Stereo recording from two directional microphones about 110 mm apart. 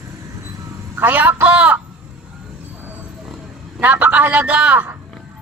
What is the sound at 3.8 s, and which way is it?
Speech, 15° right (ahead or behind).